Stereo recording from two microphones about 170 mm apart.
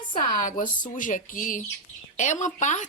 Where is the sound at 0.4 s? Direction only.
50° left (ahead or behind).